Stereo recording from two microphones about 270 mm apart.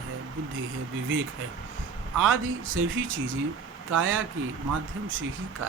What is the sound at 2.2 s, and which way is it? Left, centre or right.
Speech, right.